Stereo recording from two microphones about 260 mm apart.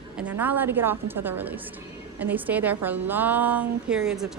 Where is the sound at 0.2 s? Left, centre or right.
Centre.